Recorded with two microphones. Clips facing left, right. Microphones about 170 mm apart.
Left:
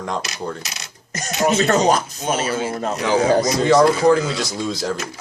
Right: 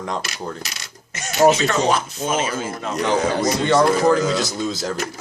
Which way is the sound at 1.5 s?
40° left (ahead or behind).